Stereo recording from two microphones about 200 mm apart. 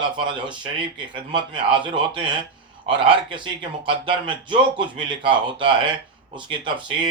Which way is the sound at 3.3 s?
25° right (ahead or behind).